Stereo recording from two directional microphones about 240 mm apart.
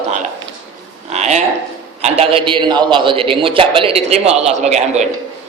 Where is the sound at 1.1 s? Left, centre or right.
Right.